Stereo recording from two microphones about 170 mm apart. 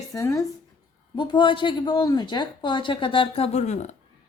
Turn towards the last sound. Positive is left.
turn(degrees=45)  # may be behind; listen again after turning